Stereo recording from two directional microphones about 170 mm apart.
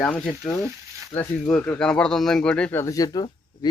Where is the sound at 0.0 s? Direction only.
5° left (ahead or behind).